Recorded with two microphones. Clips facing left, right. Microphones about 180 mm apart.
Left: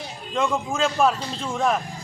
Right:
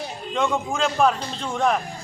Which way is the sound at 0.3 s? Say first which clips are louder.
Even; centre (ahead or behind).